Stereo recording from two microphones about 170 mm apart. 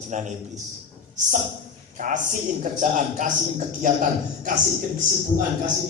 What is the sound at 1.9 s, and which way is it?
A man's voice, 50° right (ahead or behind).